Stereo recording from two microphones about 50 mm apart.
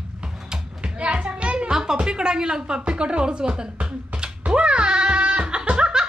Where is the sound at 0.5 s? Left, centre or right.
Centre.